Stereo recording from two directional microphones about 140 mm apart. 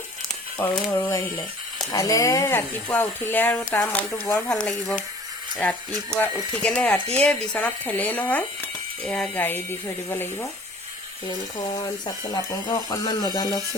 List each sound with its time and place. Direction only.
0.6 s speech: 15° left (ahead or behind)
6.1 s speech: 10° left (ahead or behind)
11.7 s speech: 30° left (ahead or behind)